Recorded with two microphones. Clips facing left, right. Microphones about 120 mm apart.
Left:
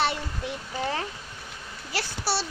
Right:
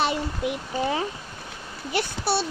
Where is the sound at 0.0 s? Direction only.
15° right (ahead or behind).